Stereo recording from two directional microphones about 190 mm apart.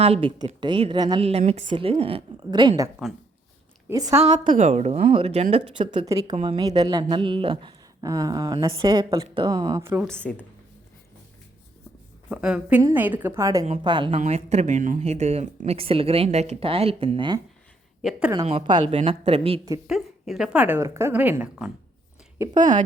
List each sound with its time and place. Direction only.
0.0 s speech: 30° right (ahead or behind)
1.2 s a woman's voice: 35° right (ahead or behind); by 4.2 s 15° right (ahead or behind)
4.4 s speech: 40° right (ahead or behind); by 10.0 s 15° right (ahead or behind)
10.0 s speech: 5° left (ahead or behind)
12.3 s a woman's voice: 5° right (ahead or behind)
13.7 s speech: 30° right (ahead or behind)
14.2 s speech: 35° right (ahead or behind)
18.0 s speech: centre (ahead or behind)
18.4 s speech: 30° right (ahead or behind)
19.9 s a woman's voice: centre (ahead or behind)